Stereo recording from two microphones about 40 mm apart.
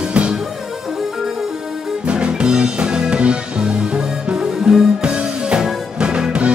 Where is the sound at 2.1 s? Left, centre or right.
Right.